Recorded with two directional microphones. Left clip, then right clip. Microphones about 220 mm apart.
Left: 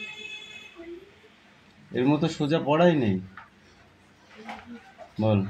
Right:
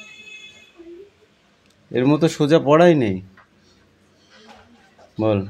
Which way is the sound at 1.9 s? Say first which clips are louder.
Right 7 dB; 45° right (ahead or behind).